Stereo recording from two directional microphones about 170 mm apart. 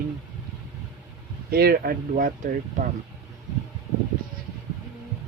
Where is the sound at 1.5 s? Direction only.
65° right (ahead or behind).